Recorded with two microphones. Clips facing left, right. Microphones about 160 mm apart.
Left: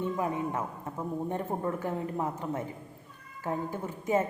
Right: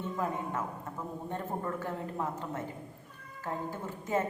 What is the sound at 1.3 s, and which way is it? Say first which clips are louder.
A woman's voice: even; 15° left (ahead or behind).